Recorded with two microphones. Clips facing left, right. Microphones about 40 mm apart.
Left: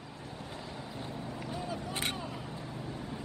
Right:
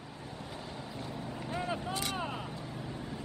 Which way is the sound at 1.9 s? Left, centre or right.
Left.